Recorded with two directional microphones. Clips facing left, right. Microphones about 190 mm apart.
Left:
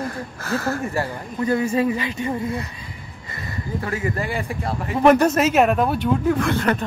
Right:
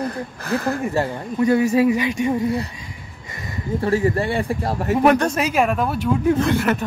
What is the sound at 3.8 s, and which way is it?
Speech, 30° right (ahead or behind).